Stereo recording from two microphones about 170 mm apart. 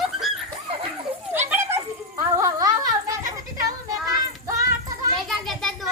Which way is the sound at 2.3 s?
20° right (ahead or behind).